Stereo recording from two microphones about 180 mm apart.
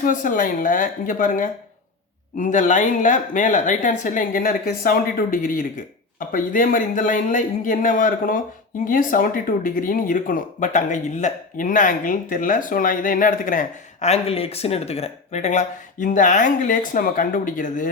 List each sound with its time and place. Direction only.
0.0 s speech: 45° left (ahead or behind)